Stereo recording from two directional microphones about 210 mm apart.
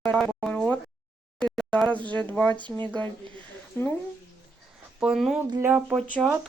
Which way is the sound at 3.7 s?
10° left (ahead or behind).